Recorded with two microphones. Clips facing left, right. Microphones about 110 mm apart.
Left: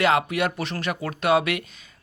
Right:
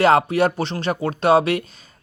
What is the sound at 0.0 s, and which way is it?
Speech, 35° right (ahead or behind).